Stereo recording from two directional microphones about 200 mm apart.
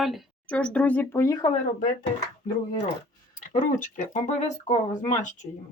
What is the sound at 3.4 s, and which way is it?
Speech, 40° left (ahead or behind).